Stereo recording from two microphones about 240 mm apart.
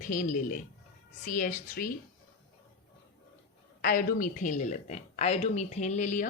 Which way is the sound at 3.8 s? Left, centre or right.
Left.